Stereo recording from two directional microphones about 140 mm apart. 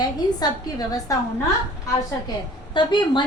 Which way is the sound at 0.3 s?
30° left (ahead or behind).